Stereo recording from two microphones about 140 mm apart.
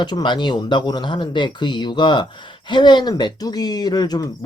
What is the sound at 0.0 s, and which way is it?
Speech, 30° left (ahead or behind).